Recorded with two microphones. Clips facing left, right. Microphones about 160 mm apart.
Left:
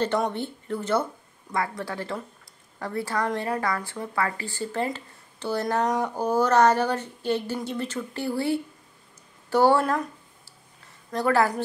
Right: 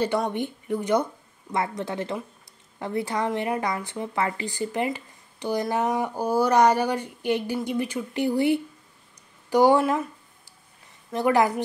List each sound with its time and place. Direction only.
0.3 s speech: 15° right (ahead or behind)
11.1 s speech: 15° right (ahead or behind)